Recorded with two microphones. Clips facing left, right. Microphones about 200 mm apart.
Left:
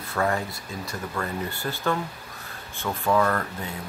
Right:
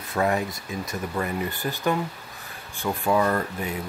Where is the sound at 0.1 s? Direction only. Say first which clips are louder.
Right 2 dB; 20° right (ahead or behind).